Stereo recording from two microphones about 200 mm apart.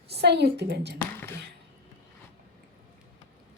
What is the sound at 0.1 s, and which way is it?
Speech, 55° right (ahead or behind).